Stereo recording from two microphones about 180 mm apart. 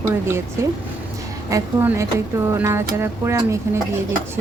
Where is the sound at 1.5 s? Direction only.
15° right (ahead or behind).